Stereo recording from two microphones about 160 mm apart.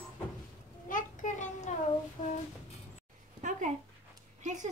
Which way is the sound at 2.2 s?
30° left (ahead or behind).